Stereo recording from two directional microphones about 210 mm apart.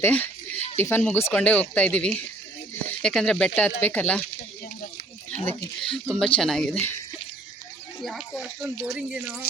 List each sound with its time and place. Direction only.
0.0 s a sound: 10° left (ahead or behind)
0.8 s speech: 10° left (ahead or behind)
5.8 s speech: 5° left (ahead or behind)
8.0 s speech: centre (ahead or behind)